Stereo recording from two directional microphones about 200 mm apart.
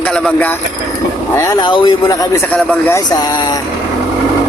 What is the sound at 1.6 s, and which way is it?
Speech, 20° left (ahead or behind).